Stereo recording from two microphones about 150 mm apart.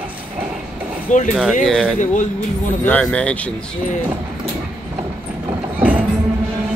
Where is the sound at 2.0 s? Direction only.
55° left (ahead or behind).